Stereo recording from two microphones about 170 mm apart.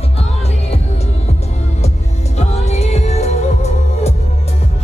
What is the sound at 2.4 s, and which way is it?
Music, 40° left (ahead or behind).